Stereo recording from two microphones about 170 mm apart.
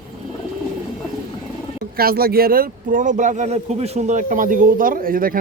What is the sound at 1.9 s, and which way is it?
Speech, 60° right (ahead or behind).